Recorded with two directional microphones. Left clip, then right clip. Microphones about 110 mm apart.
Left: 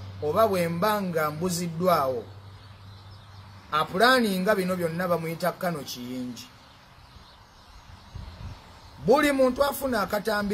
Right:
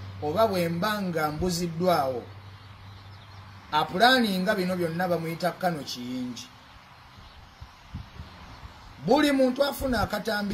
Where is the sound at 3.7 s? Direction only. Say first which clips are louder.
Even; 15° left (ahead or behind).